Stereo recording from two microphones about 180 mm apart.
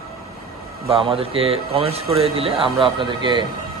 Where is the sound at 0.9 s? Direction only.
30° right (ahead or behind).